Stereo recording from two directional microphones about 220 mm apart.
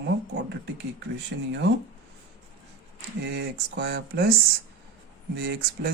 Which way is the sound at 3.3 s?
50° right (ahead or behind).